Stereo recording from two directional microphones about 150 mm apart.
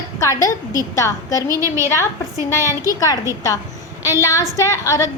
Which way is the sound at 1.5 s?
20° right (ahead or behind).